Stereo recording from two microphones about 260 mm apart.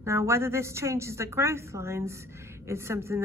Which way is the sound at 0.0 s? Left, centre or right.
Centre.